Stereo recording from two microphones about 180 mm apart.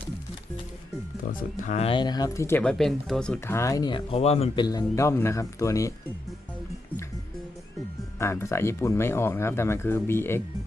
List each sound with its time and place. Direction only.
1.3 s speech: 50° left (ahead or behind); by 5.9 s 15° left (ahead or behind)
8.2 s speech: 15° left (ahead or behind)